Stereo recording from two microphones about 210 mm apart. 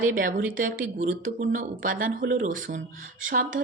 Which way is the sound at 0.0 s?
40° right (ahead or behind).